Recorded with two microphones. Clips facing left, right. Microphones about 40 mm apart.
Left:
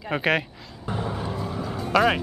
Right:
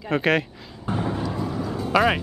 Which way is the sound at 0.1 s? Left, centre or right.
Centre.